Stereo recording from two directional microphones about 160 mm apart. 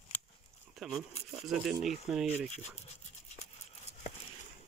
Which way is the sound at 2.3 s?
45° left (ahead or behind).